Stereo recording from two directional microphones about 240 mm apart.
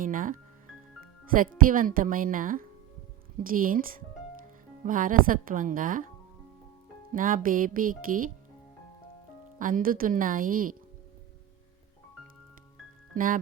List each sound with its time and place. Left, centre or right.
0.0 s speech: right
1.6 s speech: right
7.1 s speech: right
9.6 s speech: right
13.1 s speech: right